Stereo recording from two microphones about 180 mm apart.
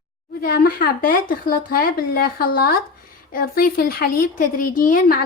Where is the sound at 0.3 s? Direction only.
55° left (ahead or behind).